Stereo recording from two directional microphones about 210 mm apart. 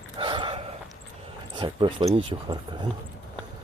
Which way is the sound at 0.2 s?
20° right (ahead or behind).